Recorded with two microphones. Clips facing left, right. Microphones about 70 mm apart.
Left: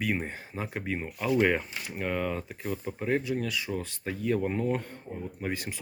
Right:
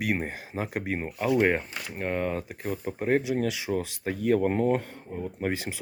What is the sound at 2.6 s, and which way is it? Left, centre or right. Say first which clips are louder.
Speech: right 3 dB; right.